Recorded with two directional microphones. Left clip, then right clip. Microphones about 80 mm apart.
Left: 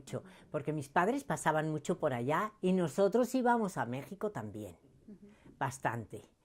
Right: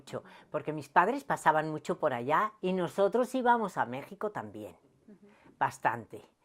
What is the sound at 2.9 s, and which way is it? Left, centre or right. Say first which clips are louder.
Speech: right 3 dB; centre.